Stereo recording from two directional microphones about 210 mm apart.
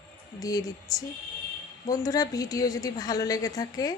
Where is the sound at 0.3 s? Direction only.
15° left (ahead or behind).